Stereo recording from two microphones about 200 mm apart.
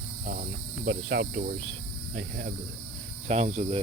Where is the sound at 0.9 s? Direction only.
50° right (ahead or behind).